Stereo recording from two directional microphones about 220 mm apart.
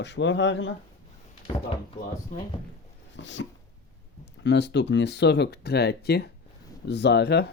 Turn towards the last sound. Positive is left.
turn(degrees=50)  # may be behind; listen again after turning